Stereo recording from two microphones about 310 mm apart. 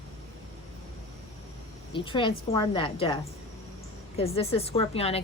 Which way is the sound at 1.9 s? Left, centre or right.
Centre.